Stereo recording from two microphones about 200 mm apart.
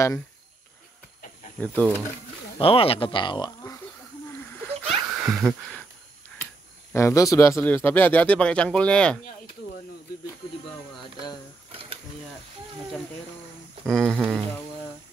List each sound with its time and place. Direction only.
1.6 s speech: 10° left (ahead or behind)
2.6 s speech: 30° left (ahead or behind)
4.3 s a sound: 10° left (ahead or behind)
5.0 s a sound: 10° right (ahead or behind)
6.9 s speech: 15° left (ahead or behind)
11.7 s mechanisms: 30° right (ahead or behind)
13.8 s speech: centre (ahead or behind)